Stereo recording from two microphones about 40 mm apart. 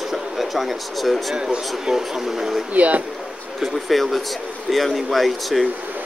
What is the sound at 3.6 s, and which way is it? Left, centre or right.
A man's voice, centre.